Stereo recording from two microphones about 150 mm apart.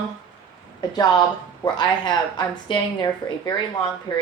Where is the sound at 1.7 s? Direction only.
30° left (ahead or behind).